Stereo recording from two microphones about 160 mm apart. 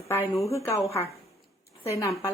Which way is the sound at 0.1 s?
15° left (ahead or behind).